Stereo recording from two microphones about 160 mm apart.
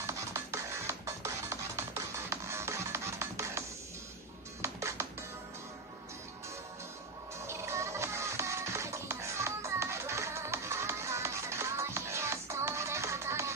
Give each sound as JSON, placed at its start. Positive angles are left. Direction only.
{"t": 0.0, "sound": "music", "side_deg": -15}
{"t": 7.4, "sound": "music", "side_deg": -15}